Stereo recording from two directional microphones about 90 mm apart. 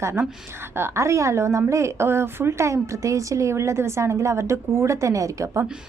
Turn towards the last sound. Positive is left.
turn(degrees=-35)  # may be behind; listen again after turning